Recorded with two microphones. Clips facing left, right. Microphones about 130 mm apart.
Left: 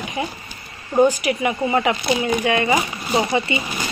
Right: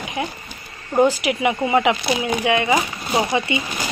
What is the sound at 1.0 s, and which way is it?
A woman's voice, 15° right (ahead or behind).